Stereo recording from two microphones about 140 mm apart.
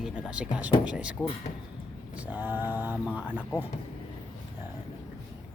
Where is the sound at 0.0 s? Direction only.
5° right (ahead or behind).